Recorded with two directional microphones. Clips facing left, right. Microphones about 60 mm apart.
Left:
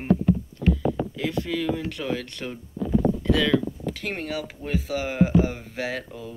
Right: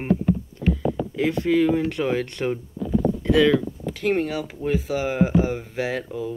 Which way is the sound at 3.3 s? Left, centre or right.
Centre.